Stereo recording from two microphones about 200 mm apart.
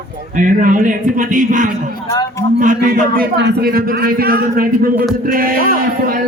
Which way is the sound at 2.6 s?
40° right (ahead or behind).